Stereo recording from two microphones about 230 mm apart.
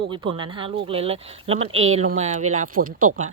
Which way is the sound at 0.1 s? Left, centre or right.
Right.